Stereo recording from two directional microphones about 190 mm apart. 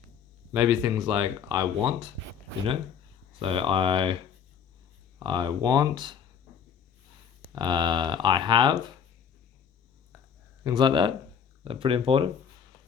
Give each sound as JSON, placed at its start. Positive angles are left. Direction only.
{"t": 0.5, "sound": "speech", "side_deg": -5}
{"t": 1.1, "sound": "speech", "side_deg": -20}
{"t": 3.3, "sound": "speech", "side_deg": -30}
{"t": 5.2, "sound": "speech", "side_deg": -25}
{"t": 7.5, "sound": "speech", "side_deg": -25}
{"t": 10.6, "sound": "speech", "side_deg": -20}